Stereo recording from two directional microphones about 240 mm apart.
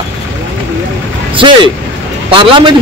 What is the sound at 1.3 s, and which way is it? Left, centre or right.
Speech, centre.